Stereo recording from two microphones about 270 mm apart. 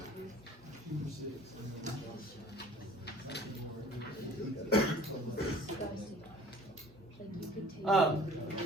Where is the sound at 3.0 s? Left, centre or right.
Left.